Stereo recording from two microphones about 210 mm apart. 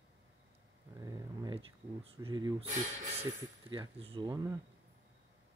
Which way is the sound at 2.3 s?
20° right (ahead or behind).